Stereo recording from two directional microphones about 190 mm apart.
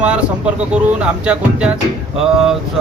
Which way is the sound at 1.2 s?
5° right (ahead or behind).